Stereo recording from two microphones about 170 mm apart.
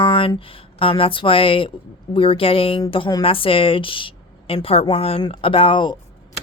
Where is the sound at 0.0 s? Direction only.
30° left (ahead or behind).